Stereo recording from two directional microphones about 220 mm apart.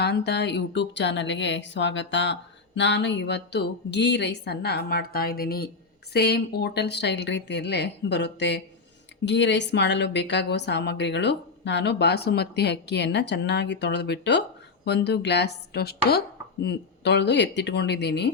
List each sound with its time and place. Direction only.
0.0 s speech: 50° left (ahead or behind)